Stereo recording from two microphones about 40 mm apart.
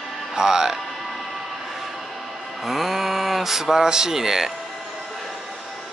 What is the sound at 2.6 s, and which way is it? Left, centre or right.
Speech, centre.